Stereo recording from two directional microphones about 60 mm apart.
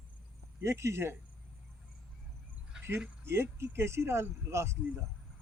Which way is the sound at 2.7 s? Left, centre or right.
Centre.